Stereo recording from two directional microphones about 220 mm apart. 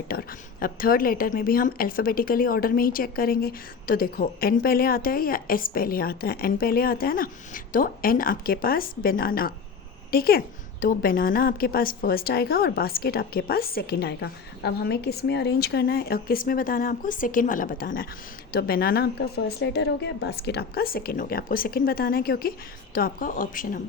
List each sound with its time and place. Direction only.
0.1 s a woman's voice: 40° left (ahead or behind)